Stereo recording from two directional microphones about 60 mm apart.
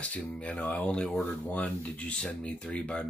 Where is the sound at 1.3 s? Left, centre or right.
Left.